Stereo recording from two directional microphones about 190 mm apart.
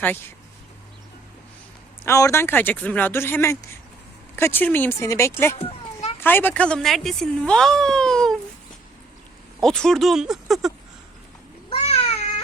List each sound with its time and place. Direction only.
2.0 s speech: 15° left (ahead or behind)
5.5 s children playing: 30° left (ahead or behind)
6.1 s speech: 10° left (ahead or behind)
9.6 s speech: 5° left (ahead or behind)
11.7 s cat: 30° left (ahead or behind)